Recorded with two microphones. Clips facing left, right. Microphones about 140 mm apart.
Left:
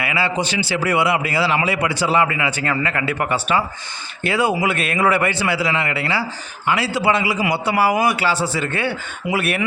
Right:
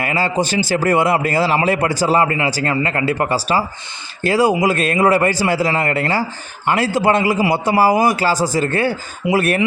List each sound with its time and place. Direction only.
0.0 s a man's voice: 40° right (ahead or behind)